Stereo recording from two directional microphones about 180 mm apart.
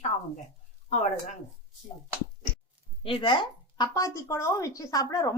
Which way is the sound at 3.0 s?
30° left (ahead or behind).